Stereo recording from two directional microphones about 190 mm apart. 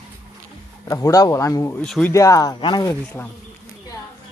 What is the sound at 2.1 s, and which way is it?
Speech, 15° left (ahead or behind).